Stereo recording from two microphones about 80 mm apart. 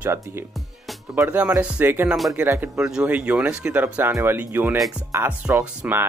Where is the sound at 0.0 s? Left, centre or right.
Right.